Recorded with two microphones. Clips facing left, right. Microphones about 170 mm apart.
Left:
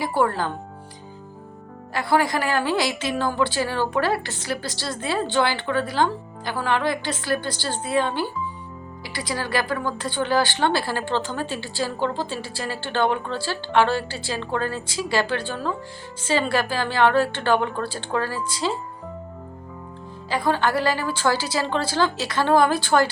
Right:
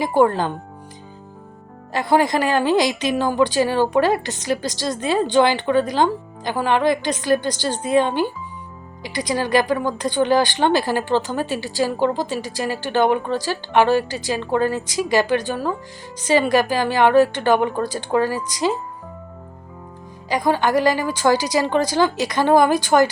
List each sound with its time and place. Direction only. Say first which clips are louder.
0.0 s speech: right 5 dB; 20° right (ahead or behind)
1.9 s speech: right 4 dB; 20° right (ahead or behind)
20.3 s speech: right 4 dB; 15° right (ahead or behind)